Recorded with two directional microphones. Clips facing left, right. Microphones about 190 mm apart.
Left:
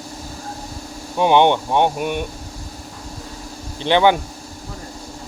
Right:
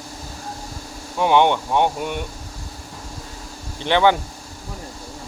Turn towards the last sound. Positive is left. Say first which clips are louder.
# left 2 dB
turn(degrees=15)  # may be behind; listen again after turning